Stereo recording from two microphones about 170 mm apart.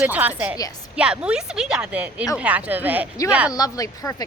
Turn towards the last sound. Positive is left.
turn(degrees=20)  # may be behind; listen again after turning